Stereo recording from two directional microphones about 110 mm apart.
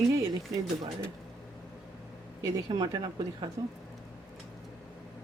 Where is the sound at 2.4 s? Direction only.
35° right (ahead or behind).